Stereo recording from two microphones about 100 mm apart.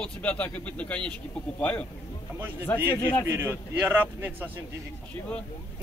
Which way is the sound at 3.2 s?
25° right (ahead or behind).